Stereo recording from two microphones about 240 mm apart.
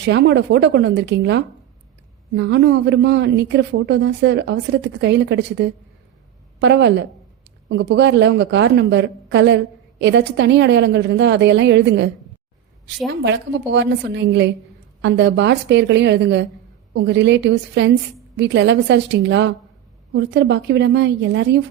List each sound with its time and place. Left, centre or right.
0.0 s a woman's voice: right